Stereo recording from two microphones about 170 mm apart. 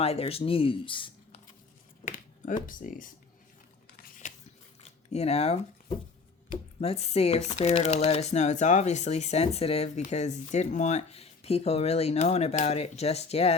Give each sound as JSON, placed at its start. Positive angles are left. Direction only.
{"t": 0.0, "sound": "speech", "side_deg": 35}
{"t": 2.0, "sound": "speech", "side_deg": 50}
{"t": 4.2, "sound": "a sound", "side_deg": 45}
{"t": 4.8, "sound": "speech", "side_deg": 40}